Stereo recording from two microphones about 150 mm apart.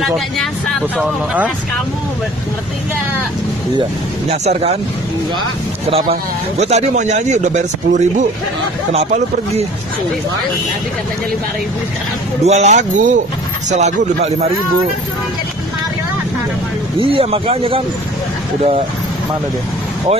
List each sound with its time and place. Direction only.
0.0 s speech: centre (ahead or behind)
4.3 s speech: 45° right (ahead or behind)
5.9 s speech: 40° right (ahead or behind)
12.4 s speech: 50° right (ahead or behind)
17.0 s speech: 40° right (ahead or behind)